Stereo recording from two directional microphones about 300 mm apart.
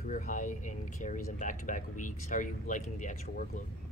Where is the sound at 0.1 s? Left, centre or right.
Left.